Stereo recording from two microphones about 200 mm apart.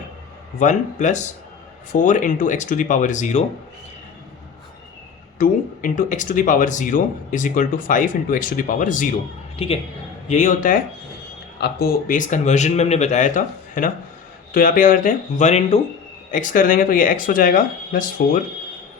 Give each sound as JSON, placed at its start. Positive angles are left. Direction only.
{"t": 0.6, "sound": "speech", "side_deg": 40}
{"t": 5.4, "sound": "speech", "side_deg": 40}